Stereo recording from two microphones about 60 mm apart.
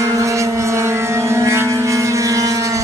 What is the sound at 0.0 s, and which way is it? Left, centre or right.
Vehicle, right.